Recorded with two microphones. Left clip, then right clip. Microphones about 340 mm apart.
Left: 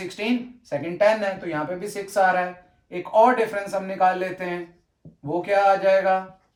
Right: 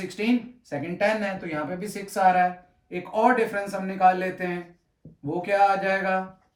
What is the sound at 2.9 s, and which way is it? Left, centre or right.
A man's voice, centre.